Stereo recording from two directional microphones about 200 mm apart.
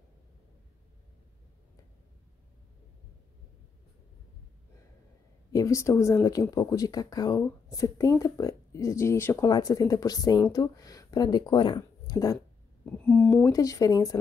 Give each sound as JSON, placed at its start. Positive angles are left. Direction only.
{"t": 5.5, "sound": "speech", "side_deg": 15}
{"t": 12.9, "sound": "speech", "side_deg": 5}